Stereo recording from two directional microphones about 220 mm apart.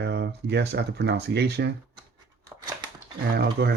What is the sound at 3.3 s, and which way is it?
Speech, 50° right (ahead or behind).